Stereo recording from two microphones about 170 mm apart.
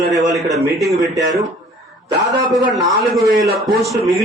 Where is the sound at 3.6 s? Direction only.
Centre (ahead or behind).